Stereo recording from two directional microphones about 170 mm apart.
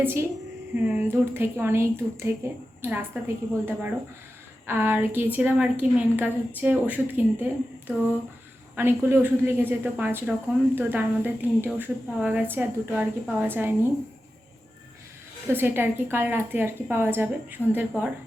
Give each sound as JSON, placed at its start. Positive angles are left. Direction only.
{"t": 0.0, "sound": "speech", "side_deg": -15}
{"t": 15.4, "sound": "speech", "side_deg": -15}